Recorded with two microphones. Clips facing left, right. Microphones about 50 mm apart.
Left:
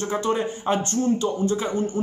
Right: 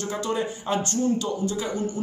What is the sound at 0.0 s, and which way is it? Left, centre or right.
Speech, left.